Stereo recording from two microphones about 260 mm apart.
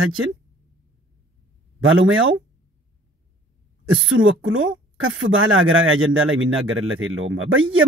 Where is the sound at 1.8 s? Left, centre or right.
Right.